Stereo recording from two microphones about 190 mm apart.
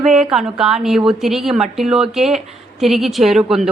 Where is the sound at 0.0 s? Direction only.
Centre (ahead or behind).